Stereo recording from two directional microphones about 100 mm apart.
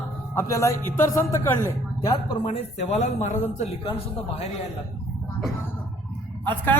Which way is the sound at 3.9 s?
70° left (ahead or behind).